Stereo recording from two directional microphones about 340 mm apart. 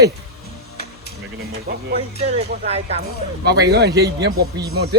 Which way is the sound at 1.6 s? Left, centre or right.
Centre.